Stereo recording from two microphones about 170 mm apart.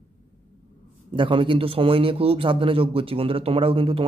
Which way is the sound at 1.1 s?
30° right (ahead or behind).